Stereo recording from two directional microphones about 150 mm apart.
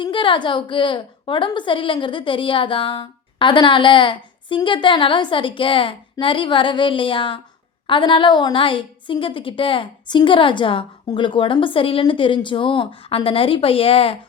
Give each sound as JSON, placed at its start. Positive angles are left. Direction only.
{"t": 0.0, "sound": "a woman's voice", "side_deg": 35}